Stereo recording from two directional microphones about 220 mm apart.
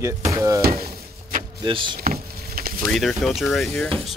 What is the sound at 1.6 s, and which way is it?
Speech, 20° right (ahead or behind).